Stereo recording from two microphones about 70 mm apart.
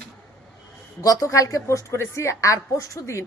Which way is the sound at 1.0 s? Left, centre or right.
Left.